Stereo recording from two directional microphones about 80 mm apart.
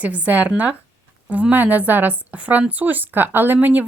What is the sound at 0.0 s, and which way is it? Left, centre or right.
A woman's voice, centre.